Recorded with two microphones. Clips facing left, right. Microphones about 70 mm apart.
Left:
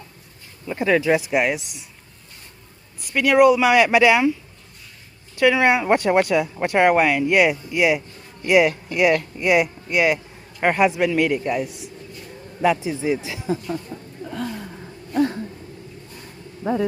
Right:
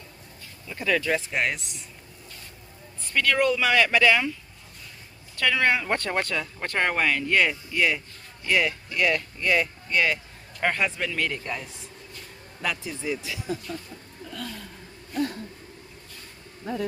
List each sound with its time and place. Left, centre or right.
0.7 s speech: left
1.0 s speech: centre
3.0 s speech: centre
5.4 s speech: centre
12.6 s speech: left
14.3 s a sound: left